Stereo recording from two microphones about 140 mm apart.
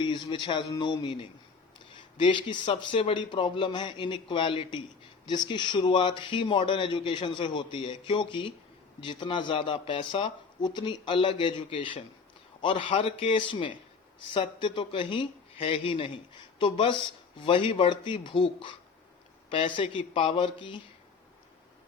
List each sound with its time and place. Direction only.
0.0 s speech: 35° left (ahead or behind)